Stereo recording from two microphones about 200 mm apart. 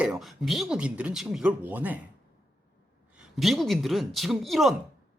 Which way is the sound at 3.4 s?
Centre (ahead or behind).